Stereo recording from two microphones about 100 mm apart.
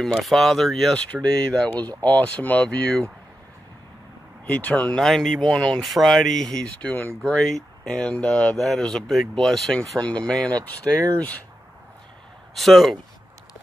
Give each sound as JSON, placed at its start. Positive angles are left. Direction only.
{"t": 0.1, "sound": "speech", "side_deg": 0}
{"t": 1.1, "sound": "speech", "side_deg": 15}
{"t": 4.5, "sound": "speech", "side_deg": 15}
{"t": 4.9, "sound": "speech", "side_deg": 5}
{"t": 7.3, "sound": "speech", "side_deg": 5}
{"t": 12.5, "sound": "speech", "side_deg": 0}